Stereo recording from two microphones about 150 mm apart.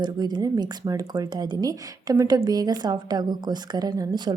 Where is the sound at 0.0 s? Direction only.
30° right (ahead or behind).